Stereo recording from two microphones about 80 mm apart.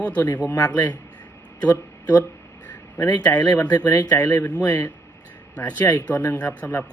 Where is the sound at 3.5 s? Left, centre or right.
Centre.